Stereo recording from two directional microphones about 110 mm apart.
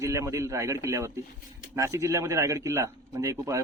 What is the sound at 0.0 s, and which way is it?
Speech, 25° right (ahead or behind).